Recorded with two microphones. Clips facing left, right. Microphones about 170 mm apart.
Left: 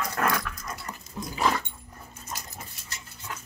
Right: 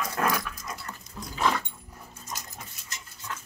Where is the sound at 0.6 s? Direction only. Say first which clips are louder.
Left 1 dB; centre (ahead or behind).